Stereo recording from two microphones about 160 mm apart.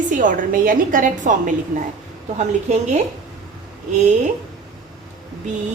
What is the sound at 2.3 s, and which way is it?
Speech, 45° right (ahead or behind).